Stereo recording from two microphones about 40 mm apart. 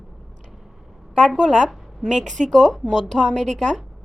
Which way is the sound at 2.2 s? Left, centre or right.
Centre.